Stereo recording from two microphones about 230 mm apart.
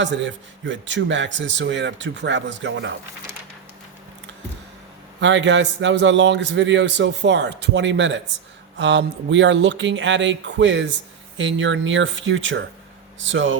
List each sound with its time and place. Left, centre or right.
0.0 s a man's voice: right
5.2 s a man's voice: right